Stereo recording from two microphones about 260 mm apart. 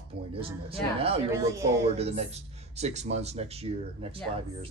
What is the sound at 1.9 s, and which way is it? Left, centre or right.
Speech, right.